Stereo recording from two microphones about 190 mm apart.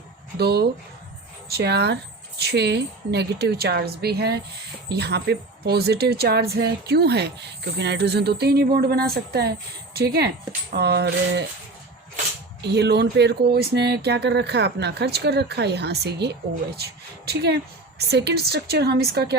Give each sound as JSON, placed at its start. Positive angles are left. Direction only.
{"t": 0.3, "sound": "speech", "side_deg": -60}
{"t": 12.6, "sound": "speech", "side_deg": -60}